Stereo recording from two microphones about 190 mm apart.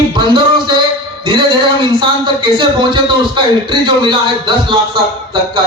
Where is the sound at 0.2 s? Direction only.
25° right (ahead or behind).